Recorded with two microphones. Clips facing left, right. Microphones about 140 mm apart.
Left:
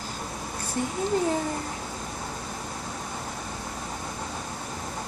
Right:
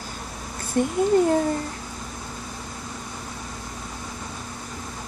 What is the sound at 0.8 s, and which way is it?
Speech, 55° right (ahead or behind).